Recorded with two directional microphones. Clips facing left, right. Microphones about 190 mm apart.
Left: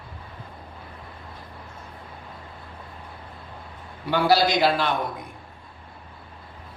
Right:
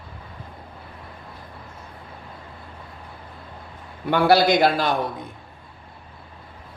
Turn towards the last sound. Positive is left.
turn(degrees=-50)  # may be behind; listen again after turning